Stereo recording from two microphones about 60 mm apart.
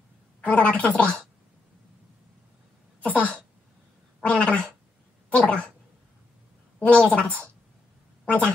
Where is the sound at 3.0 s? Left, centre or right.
Left.